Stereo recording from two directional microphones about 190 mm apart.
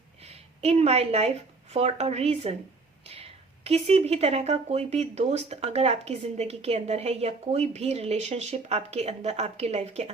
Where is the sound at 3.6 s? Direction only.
35° right (ahead or behind).